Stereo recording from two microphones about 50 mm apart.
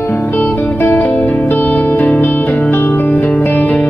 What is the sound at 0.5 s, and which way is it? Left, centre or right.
Music, left.